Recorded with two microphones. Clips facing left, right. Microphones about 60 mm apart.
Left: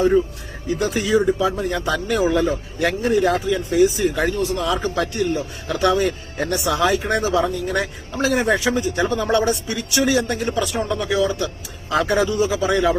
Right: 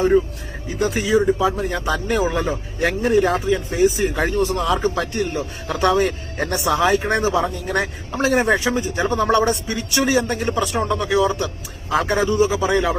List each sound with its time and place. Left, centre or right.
0.8 s speech: right